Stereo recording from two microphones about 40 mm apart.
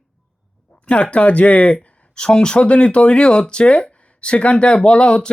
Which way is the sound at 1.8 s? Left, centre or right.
Left.